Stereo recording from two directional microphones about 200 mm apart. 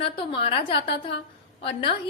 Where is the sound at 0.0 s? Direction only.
25° left (ahead or behind).